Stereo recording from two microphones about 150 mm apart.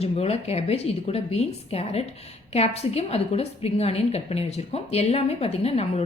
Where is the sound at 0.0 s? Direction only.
45° left (ahead or behind).